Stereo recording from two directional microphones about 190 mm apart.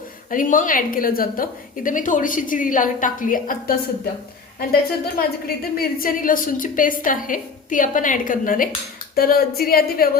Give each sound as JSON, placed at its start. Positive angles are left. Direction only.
{"t": 0.3, "sound": "a woman's voice", "side_deg": 45}
{"t": 5.5, "sound": "a woman's voice", "side_deg": 50}